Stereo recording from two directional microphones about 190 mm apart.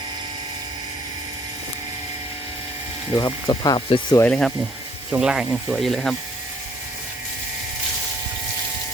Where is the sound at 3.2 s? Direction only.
20° left (ahead or behind).